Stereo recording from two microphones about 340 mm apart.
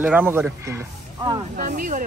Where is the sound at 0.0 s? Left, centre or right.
Centre.